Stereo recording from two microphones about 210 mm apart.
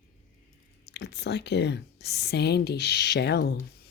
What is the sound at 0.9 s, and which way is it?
Speech, 55° left (ahead or behind).